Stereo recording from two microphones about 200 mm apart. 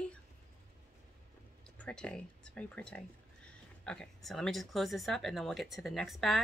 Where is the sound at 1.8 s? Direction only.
5° left (ahead or behind).